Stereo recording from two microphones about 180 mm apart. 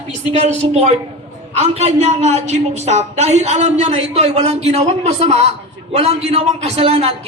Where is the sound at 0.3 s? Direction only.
40° right (ahead or behind).